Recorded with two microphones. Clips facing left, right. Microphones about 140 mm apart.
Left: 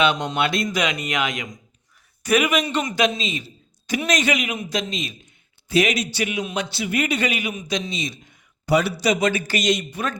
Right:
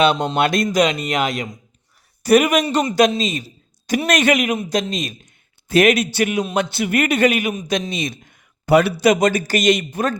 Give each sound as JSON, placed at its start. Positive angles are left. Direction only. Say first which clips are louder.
{"t": 0.0, "sound": "a man's voice", "louder": "right 4 dB", "side_deg": -35}